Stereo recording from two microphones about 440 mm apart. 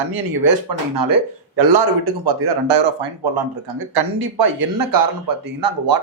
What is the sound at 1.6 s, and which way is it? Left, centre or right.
A man's voice, right.